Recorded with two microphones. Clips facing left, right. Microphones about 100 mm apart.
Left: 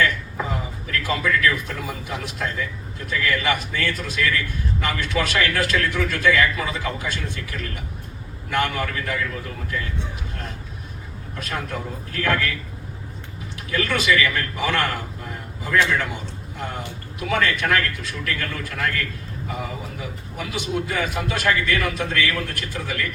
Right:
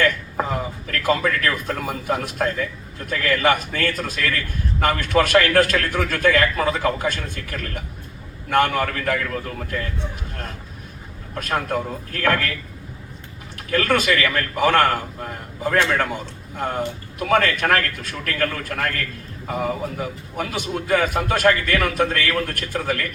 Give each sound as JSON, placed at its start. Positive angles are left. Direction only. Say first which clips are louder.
{"t": 0.4, "sound": "a sound", "louder": "right 4 dB", "side_deg": -45}
{"t": 0.9, "sound": "a man's voice", "louder": "right 2 dB", "side_deg": -50}
{"t": 11.3, "sound": "a man's voice", "louder": "right 6 dB", "side_deg": -45}
{"t": 13.7, "sound": "a man's voice", "louder": "right 2 dB", "side_deg": -50}